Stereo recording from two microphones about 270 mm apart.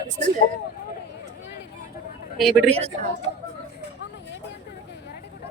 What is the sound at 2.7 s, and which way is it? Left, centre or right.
Speech, right.